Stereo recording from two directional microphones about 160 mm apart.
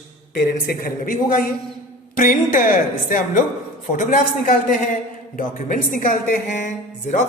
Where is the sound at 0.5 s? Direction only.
65° left (ahead or behind).